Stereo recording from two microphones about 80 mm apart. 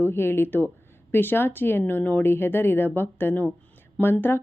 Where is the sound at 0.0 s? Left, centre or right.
Left.